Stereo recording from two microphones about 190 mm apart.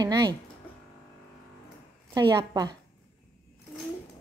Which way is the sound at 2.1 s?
25° right (ahead or behind).